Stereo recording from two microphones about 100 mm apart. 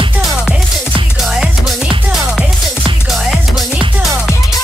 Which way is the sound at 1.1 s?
5° right (ahead or behind).